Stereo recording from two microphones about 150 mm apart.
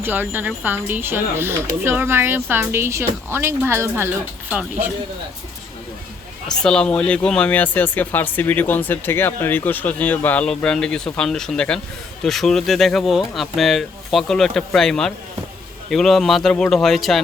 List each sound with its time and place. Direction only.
0.0 s speech: 15° right (ahead or behind)
6.6 s speech: 5° left (ahead or behind)